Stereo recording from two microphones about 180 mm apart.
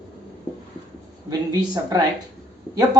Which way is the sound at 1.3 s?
20° right (ahead or behind).